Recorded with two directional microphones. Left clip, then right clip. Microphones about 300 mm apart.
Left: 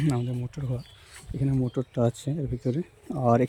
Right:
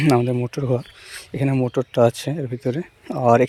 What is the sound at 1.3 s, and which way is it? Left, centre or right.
Speech, centre.